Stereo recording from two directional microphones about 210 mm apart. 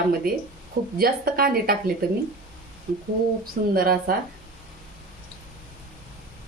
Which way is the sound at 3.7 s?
45° right (ahead or behind).